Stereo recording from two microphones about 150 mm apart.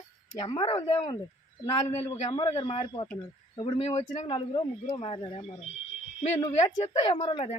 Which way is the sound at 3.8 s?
45° left (ahead or behind).